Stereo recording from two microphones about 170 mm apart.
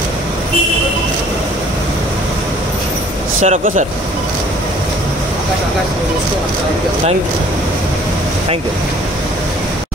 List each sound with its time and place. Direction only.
3.4 s speech: 45° right (ahead or behind)